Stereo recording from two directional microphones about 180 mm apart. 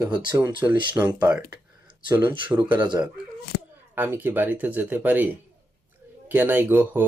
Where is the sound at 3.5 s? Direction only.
75° left (ahead or behind).